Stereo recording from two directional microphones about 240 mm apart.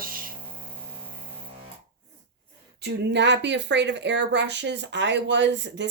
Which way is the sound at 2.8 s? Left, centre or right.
Right.